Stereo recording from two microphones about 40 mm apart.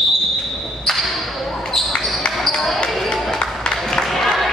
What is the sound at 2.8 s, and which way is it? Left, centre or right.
Basketball bounce, centre.